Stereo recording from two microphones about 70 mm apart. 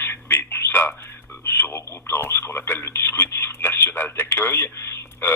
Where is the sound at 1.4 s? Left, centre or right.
Left.